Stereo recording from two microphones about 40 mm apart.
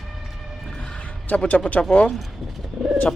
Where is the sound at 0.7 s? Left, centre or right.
Centre.